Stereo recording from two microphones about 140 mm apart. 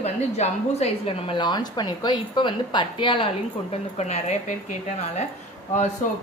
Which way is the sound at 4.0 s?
55° left (ahead or behind).